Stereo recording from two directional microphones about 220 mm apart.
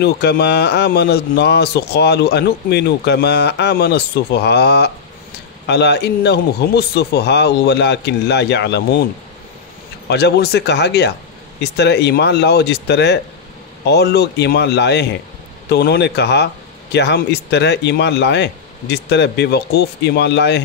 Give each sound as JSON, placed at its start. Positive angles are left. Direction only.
{"t": 0.0, "sound": "a man's voice", "side_deg": 50}
{"t": 10.0, "sound": "a man's voice", "side_deg": 50}